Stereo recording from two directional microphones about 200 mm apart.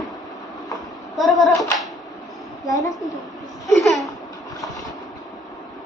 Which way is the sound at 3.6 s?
Centre (ahead or behind).